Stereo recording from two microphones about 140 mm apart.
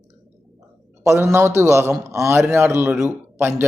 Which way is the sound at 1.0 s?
20° right (ahead or behind).